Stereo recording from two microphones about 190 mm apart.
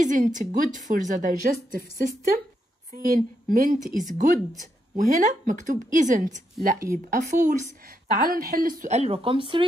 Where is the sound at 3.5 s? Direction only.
45° right (ahead or behind).